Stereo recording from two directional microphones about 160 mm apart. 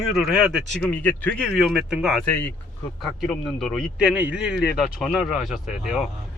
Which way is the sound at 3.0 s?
Centre (ahead or behind).